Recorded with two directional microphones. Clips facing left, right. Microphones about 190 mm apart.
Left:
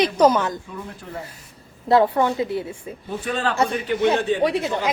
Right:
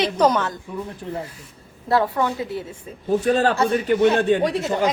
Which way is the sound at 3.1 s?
40° right (ahead or behind).